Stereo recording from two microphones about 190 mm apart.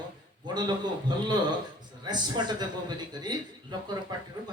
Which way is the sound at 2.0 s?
20° right (ahead or behind).